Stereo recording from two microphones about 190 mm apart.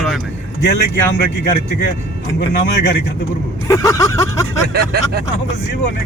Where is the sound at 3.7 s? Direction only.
15° left (ahead or behind).